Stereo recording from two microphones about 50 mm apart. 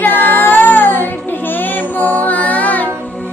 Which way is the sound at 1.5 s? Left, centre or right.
Left.